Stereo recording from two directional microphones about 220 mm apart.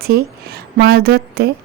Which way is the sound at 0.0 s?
45° right (ahead or behind).